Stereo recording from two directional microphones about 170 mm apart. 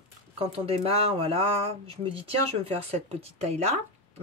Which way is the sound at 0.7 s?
35° right (ahead or behind).